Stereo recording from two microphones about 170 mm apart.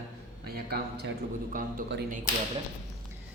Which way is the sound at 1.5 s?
55° right (ahead or behind).